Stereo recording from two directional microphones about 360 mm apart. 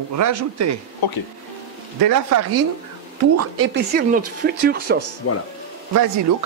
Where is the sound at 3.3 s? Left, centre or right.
Right.